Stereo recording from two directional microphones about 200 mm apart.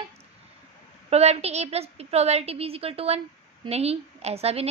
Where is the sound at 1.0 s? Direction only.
30° right (ahead or behind).